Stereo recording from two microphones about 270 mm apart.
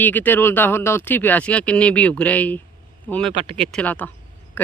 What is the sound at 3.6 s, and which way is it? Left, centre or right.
Speech, centre.